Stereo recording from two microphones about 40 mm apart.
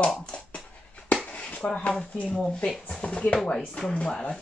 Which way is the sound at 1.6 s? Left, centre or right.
Left.